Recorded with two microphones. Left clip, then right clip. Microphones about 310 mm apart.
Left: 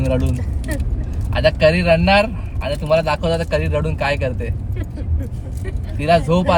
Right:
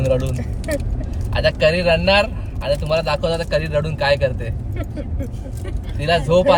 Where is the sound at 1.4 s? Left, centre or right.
Centre.